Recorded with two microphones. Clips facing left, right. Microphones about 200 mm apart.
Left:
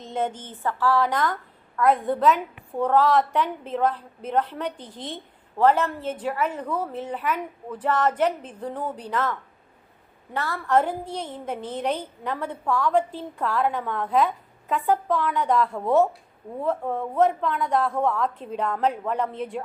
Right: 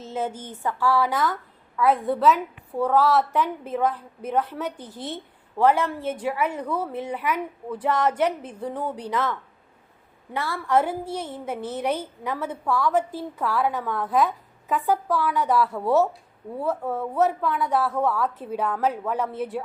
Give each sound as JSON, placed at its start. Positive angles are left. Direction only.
{"t": 0.0, "sound": "a woman's voice", "side_deg": -5}
{"t": 10.3, "sound": "a woman's voice", "side_deg": -10}
{"t": 15.7, "sound": "speech", "side_deg": 15}
{"t": 16.6, "sound": "a woman's voice", "side_deg": -5}